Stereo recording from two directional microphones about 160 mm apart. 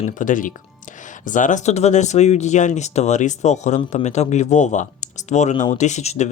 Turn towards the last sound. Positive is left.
turn(degrees=45)  # may be behind; listen again after turning